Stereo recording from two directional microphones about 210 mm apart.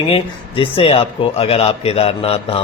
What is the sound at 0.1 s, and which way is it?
Speech, 25° left (ahead or behind).